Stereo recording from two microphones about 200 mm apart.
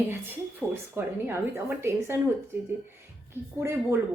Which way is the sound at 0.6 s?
5° right (ahead or behind).